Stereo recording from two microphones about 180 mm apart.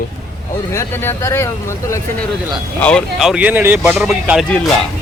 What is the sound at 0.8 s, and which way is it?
Speech, 15° left (ahead or behind).